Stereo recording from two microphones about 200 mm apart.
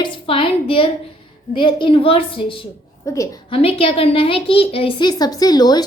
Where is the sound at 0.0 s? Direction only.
25° left (ahead or behind).